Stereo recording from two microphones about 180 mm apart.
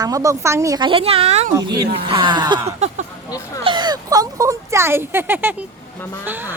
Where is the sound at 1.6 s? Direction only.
25° right (ahead or behind).